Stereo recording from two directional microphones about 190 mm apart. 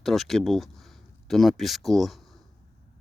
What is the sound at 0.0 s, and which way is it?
Speech, centre (ahead or behind).